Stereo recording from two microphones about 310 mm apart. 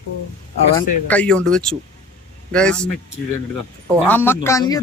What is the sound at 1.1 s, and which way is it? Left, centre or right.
Speech, centre.